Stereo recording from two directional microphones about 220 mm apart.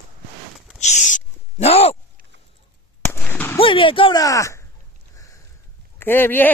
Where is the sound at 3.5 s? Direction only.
25° left (ahead or behind).